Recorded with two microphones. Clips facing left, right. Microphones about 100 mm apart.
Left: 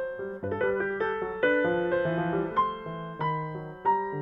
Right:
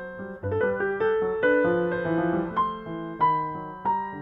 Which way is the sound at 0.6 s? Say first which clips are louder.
Right 4 dB; 40° right (ahead or behind).